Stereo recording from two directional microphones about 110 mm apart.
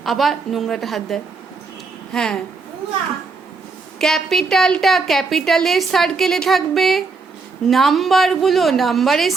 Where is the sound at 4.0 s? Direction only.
5° left (ahead or behind).